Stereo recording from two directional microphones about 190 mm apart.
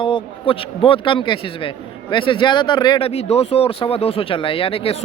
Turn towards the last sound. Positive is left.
turn(degrees=30)  # may be behind; listen again after turning